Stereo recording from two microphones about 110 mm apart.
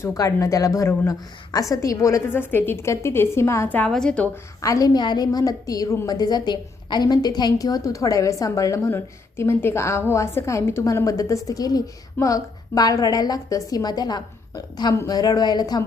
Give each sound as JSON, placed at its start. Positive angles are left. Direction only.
{"t": 0.0, "sound": "a woman's voice", "side_deg": 30}
{"t": 3.8, "sound": "a woman's voice", "side_deg": 5}
{"t": 4.6, "sound": "a woman's voice", "side_deg": 30}